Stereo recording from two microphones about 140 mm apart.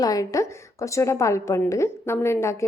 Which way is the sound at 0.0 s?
25° left (ahead or behind).